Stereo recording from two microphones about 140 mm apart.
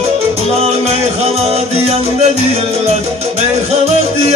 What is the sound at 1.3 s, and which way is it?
Music, 45° right (ahead or behind).